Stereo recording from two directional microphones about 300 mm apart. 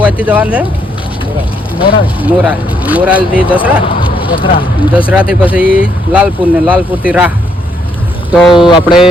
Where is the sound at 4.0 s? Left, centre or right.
Centre.